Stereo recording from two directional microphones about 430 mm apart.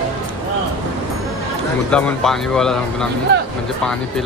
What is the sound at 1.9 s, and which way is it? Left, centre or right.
Speech, centre.